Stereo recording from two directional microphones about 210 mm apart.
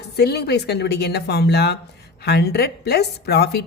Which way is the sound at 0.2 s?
50° left (ahead or behind).